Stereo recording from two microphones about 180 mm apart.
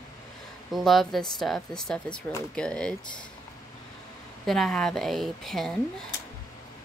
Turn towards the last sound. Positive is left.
turn(degrees=0)  # may be behind; listen again after turning